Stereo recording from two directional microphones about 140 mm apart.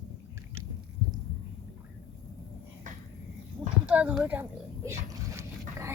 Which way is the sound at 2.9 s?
60° right (ahead or behind).